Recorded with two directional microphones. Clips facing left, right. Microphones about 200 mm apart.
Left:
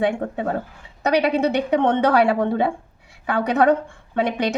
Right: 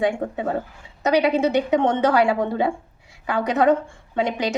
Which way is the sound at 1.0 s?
60° left (ahead or behind).